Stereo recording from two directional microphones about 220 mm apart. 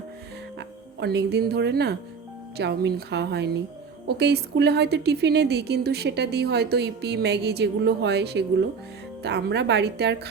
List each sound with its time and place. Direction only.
0.9 s a woman's voice: 50° right (ahead or behind)